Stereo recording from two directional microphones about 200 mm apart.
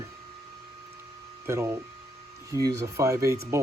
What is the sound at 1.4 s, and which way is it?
Speech, 10° right (ahead or behind).